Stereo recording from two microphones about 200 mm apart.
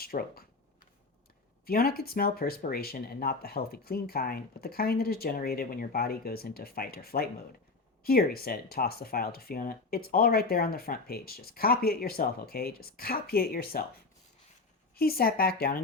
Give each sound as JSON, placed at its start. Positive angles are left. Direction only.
{"t": 0.0, "sound": "a sound", "side_deg": 50}
{"t": 1.6, "sound": "speech", "side_deg": 50}
{"t": 14.9, "sound": "speech", "side_deg": 50}